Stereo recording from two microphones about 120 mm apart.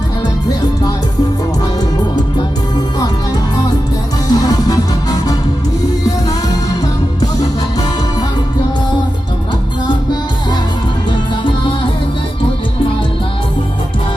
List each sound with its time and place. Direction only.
4.4 s music: 30° left (ahead or behind)